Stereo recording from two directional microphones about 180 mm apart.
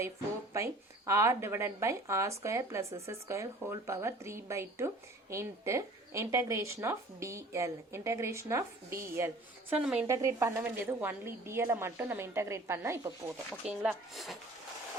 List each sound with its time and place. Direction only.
0.5 s speech: 15° right (ahead or behind)
10.1 s speech: 15° right (ahead or behind)
13.5 s speech: 5° right (ahead or behind)